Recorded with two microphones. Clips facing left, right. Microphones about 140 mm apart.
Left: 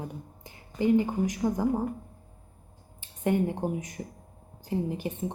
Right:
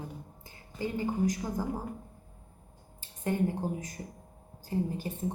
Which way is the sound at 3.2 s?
20° left (ahead or behind).